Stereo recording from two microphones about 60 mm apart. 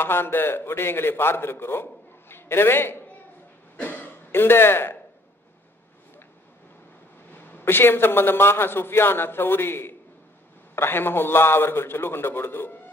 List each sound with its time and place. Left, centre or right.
0.0 s a man's voice: left
3.7 s cough: left
4.3 s a man's voice: left
7.3 s a man's voice: left